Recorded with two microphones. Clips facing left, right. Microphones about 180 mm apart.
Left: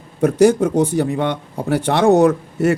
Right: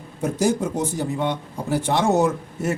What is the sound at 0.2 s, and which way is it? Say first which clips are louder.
Speech: left 8 dB; 65° left (ahead or behind).